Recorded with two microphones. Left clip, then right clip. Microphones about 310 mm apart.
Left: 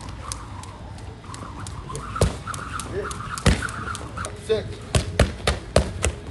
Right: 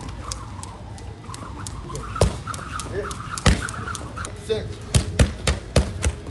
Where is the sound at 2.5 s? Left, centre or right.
Centre.